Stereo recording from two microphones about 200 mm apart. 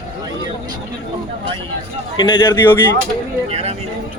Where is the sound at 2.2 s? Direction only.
25° left (ahead or behind).